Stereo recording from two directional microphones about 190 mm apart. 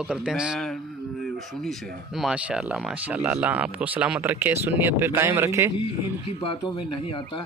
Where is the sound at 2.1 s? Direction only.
5° right (ahead or behind).